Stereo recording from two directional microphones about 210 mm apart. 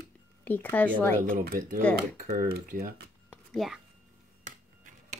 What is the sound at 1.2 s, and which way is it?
Speech, 45° right (ahead or behind).